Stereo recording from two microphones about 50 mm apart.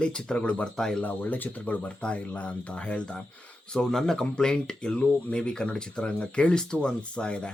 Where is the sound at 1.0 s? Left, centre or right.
Left.